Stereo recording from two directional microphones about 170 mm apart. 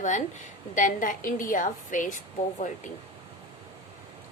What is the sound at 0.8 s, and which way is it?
A woman's voice, 50° left (ahead or behind).